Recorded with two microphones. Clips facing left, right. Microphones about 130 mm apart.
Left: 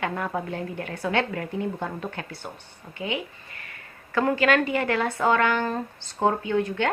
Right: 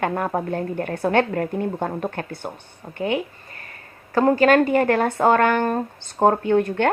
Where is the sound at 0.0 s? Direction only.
45° right (ahead or behind).